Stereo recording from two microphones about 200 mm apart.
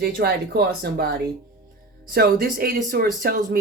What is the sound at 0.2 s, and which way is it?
Speech, 50° right (ahead or behind).